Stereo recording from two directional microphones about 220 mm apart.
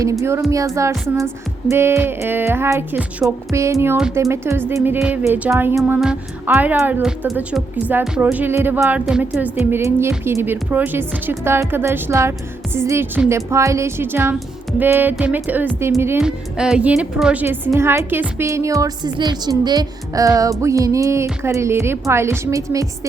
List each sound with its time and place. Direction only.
0.0 s music: 15° right (ahead or behind)
3.9 s speech: 5° right (ahead or behind)
4.2 s music: 10° right (ahead or behind)